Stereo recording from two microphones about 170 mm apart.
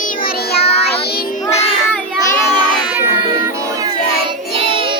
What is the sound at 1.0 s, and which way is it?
Child singing, 60° left (ahead or behind).